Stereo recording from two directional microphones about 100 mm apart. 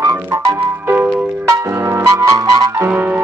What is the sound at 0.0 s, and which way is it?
Music, 25° right (ahead or behind).